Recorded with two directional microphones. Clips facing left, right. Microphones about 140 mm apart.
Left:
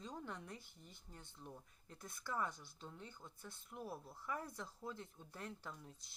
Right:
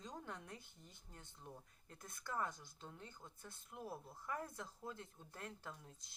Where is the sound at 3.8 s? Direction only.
15° right (ahead or behind).